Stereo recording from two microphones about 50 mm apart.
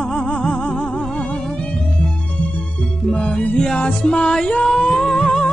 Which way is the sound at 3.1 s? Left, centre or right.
Left.